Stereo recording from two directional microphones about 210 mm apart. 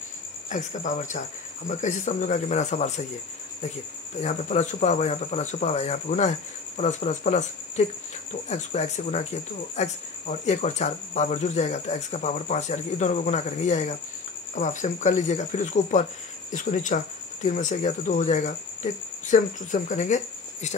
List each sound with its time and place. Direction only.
0.5 s speech: 35° left (ahead or behind)
4.2 s speech: 30° left (ahead or behind)